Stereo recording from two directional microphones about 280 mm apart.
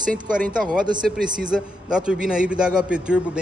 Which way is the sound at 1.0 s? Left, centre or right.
Centre.